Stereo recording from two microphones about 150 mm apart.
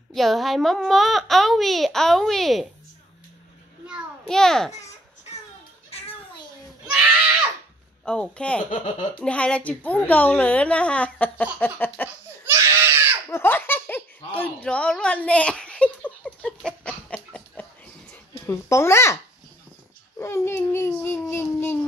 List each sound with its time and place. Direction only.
0.1 s a child's voice: centre (ahead or behind)
4.3 s a child's voice: 5° left (ahead or behind)
8.0 s a woman's voice: 5° left (ahead or behind)
12.5 s baby cry: 20° right (ahead or behind)
13.3 s laughter: 15° left (ahead or behind)
18.5 s a woman's voice: 15° left (ahead or behind)
20.2 s a woman's voice: 20° left (ahead or behind)